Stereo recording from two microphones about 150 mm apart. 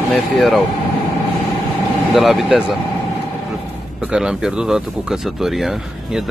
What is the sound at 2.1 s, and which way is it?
Speech, centre (ahead or behind).